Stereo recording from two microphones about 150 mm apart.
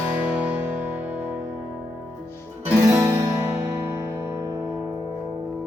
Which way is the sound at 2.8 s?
20° right (ahead or behind).